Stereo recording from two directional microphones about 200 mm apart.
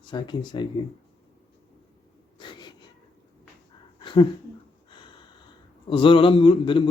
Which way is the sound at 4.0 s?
25° left (ahead or behind).